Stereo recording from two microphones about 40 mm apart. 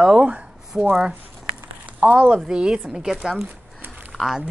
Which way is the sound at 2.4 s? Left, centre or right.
Centre.